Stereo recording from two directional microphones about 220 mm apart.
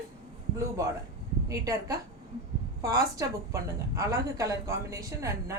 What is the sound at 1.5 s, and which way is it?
A woman's voice, 15° right (ahead or behind).